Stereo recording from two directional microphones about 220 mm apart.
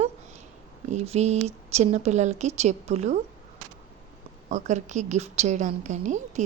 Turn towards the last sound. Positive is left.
turn(degrees=-35)  # may be behind; listen again after turning